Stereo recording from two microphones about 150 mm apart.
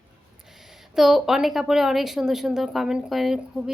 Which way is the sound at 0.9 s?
5° right (ahead or behind).